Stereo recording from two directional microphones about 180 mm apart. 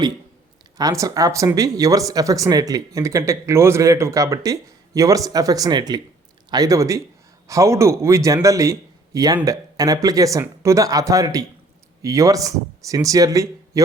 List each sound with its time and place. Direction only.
0.8 s a man's voice: 20° right (ahead or behind)